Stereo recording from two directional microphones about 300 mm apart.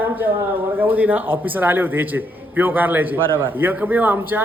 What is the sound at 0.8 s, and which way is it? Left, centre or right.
A man's voice, centre.